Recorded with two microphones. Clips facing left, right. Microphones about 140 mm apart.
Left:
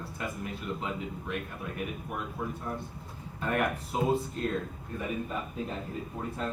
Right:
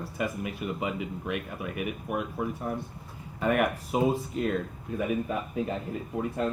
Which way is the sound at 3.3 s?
75° right (ahead or behind).